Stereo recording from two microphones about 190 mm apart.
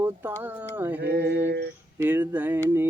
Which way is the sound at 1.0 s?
55° right (ahead or behind).